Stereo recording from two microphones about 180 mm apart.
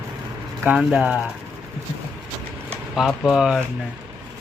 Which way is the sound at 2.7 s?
Centre (ahead or behind).